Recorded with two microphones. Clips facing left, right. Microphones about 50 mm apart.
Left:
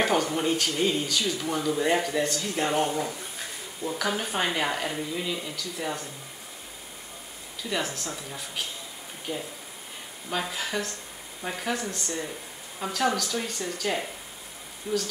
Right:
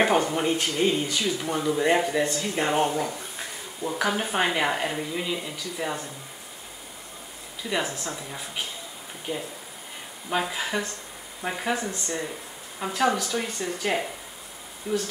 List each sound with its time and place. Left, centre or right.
0.0 s speech: centre
7.7 s speech: centre
10.3 s speech: centre
14.9 s speech: centre